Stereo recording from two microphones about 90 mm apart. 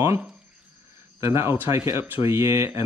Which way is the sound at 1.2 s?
30° right (ahead or behind).